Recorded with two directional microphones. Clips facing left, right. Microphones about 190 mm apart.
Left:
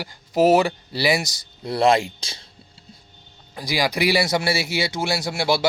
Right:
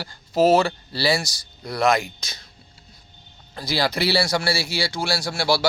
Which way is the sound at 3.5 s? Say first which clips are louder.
Even; 15° left (ahead or behind).